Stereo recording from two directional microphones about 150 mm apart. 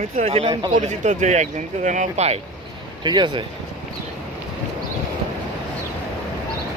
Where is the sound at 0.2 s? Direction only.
40° right (ahead or behind).